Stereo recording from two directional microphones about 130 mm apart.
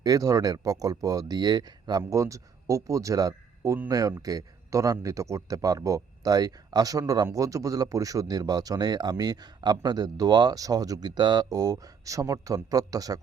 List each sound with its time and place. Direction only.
0.0 s speech: 30° right (ahead or behind)